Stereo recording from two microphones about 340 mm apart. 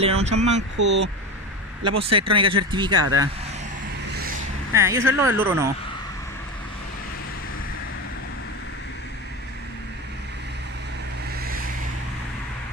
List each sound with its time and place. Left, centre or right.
0.0 s speech: centre
0.7 s speech: right
2.3 s speech: centre
4.1 s a sound: right
4.7 s speech: centre